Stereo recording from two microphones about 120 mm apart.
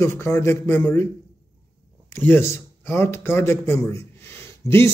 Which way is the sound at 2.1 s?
20° left (ahead or behind).